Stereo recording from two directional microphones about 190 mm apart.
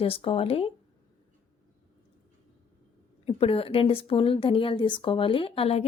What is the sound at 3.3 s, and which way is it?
Speech, 30° left (ahead or behind).